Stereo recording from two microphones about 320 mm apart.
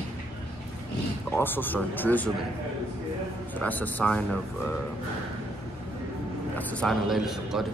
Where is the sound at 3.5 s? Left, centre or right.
Centre.